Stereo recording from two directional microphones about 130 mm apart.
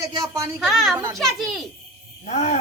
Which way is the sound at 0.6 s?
Centre (ahead or behind).